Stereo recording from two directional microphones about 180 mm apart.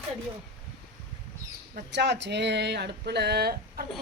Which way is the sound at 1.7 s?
70° right (ahead or behind).